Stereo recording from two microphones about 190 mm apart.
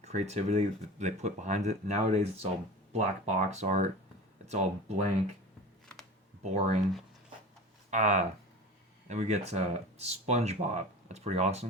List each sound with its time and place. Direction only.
0.0 s speech: 35° right (ahead or behind)
6.4 s speech: 40° right (ahead or behind)
7.9 s speech: 40° right (ahead or behind)